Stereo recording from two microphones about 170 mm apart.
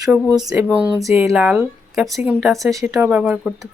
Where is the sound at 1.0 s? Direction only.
15° right (ahead or behind).